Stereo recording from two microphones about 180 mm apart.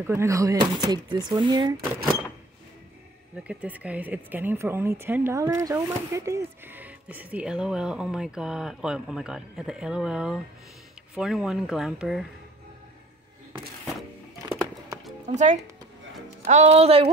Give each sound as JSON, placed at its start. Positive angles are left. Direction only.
{"t": 0.0, "sound": "speech", "side_deg": -15}
{"t": 3.4, "sound": "speech", "side_deg": -10}
{"t": 15.2, "sound": "speech", "side_deg": -40}